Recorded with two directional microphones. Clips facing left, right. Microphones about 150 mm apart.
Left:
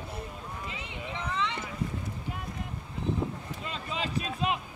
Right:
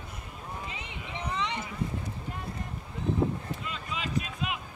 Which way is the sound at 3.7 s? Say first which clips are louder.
Left 5 dB; 30° left (ahead or behind).